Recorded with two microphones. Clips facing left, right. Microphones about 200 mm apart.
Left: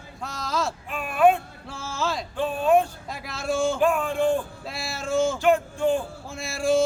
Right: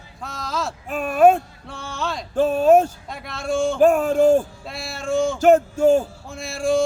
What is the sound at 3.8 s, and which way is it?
Speech, 45° right (ahead or behind).